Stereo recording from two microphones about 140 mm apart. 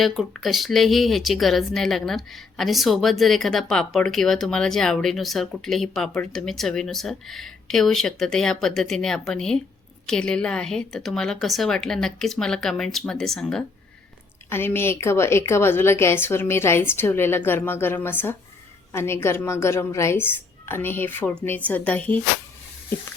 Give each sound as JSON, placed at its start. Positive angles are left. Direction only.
{"t": 0.0, "sound": "speech", "side_deg": 0}
{"t": 14.5, "sound": "a woman's voice", "side_deg": 15}